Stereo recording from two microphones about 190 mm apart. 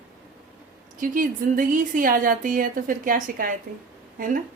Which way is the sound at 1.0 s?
45° right (ahead or behind).